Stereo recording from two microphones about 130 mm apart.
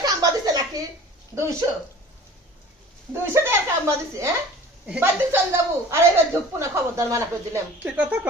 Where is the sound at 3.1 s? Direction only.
20° right (ahead or behind).